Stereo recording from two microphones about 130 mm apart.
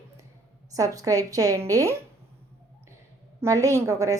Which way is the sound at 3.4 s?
25° right (ahead or behind).